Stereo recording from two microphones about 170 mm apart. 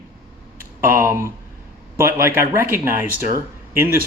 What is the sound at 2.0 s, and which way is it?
Speech, 15° right (ahead or behind).